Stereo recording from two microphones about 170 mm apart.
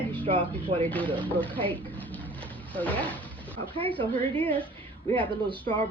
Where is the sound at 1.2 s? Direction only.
10° left (ahead or behind).